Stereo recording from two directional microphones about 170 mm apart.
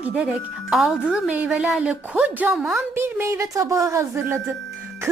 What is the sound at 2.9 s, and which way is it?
Speech, 15° right (ahead or behind).